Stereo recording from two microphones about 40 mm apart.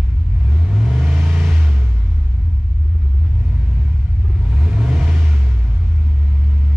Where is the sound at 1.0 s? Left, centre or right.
Right.